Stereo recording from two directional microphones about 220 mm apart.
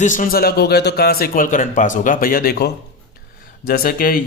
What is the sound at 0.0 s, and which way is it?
A man's voice, 35° left (ahead or behind).